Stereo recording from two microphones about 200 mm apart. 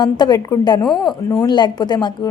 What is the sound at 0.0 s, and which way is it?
Speech, 20° left (ahead or behind).